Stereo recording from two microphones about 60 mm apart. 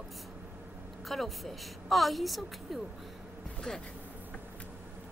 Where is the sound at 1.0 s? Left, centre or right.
Centre.